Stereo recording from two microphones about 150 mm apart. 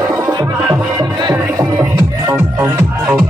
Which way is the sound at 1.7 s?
15° right (ahead or behind).